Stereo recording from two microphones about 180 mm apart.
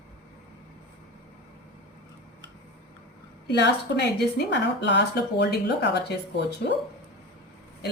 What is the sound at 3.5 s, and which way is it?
A woman's voice, 75° left (ahead or behind).